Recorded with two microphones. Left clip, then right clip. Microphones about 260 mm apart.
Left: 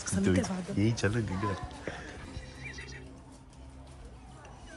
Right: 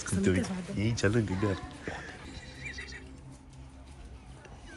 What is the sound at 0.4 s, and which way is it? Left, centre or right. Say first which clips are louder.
Speech: left 3 dB; left.